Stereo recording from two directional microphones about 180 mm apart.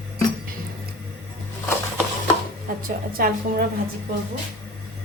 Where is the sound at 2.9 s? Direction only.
55° right (ahead or behind).